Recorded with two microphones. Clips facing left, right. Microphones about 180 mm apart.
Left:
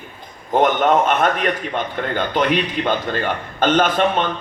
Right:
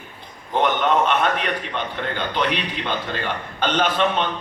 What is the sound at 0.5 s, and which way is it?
A man's voice, 45° left (ahead or behind).